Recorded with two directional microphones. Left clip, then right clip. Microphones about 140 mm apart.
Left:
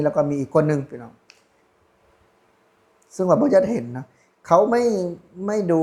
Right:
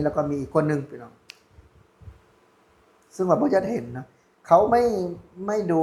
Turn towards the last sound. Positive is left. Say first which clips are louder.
# left 3 dB
turn(degrees=55)  # may be behind; listen again after turning